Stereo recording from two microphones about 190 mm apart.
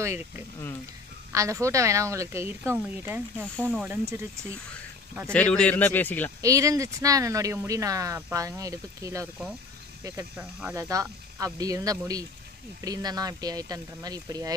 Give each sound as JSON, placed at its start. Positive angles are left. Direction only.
{"t": 0.0, "sound": "speech", "side_deg": -10}
{"t": 4.0, "sound": "speech", "side_deg": -15}
{"t": 5.3, "sound": "a man's voice", "side_deg": 5}
{"t": 6.4, "sound": "speech", "side_deg": -15}